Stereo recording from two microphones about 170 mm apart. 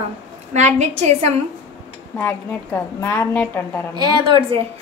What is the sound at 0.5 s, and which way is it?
Speech, 45° right (ahead or behind).